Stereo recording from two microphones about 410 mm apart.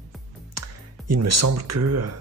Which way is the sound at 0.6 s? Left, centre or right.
Right.